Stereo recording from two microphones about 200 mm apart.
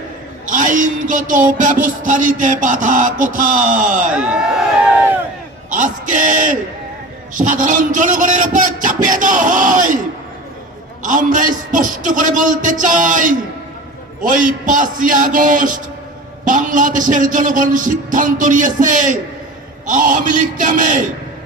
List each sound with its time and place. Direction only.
0.4 s speech: 40° right (ahead or behind)
4.1 s speech: 5° right (ahead or behind)
5.7 s speech: 40° right (ahead or behind)
11.0 s speech: 40° right (ahead or behind)